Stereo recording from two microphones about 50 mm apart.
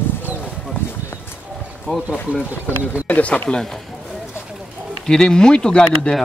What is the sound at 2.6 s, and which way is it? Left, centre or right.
Speech, right.